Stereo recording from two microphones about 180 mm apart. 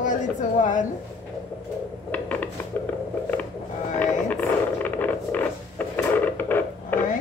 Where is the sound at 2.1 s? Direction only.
10° left (ahead or behind).